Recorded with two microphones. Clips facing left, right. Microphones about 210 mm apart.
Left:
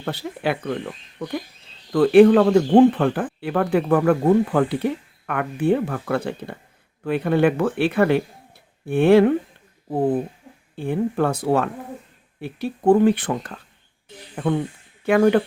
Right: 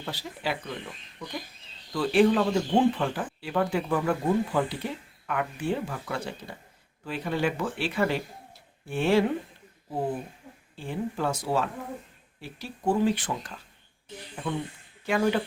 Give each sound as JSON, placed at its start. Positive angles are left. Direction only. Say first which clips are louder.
{"t": 0.0, "sound": "speech", "louder": "left 8 dB", "side_deg": 60}
{"t": 1.9, "sound": "speech", "louder": "left 10 dB", "side_deg": 60}